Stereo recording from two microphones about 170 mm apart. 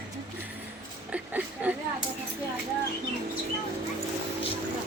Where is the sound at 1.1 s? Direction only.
10° right (ahead or behind).